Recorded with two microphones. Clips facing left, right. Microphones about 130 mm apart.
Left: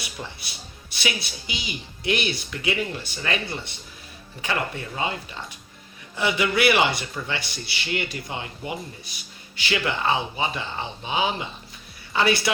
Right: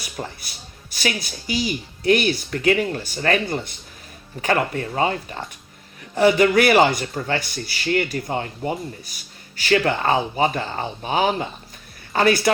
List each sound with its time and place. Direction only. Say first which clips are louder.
0.0 s a man's voice: right 4 dB; 45° right (ahead or behind)